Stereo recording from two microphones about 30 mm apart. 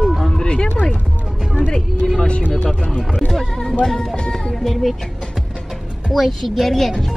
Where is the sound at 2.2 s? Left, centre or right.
Left.